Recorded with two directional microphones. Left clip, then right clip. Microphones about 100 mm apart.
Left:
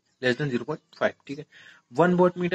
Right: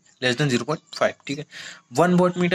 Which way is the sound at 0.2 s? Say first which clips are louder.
Right 4 dB; 30° right (ahead or behind).